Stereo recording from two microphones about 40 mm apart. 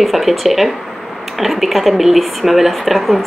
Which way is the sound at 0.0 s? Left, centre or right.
Centre.